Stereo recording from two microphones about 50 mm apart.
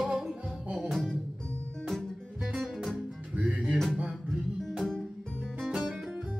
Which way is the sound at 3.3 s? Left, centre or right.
Right.